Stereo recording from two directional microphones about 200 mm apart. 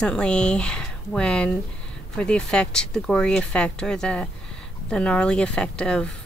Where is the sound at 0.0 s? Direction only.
5° left (ahead or behind).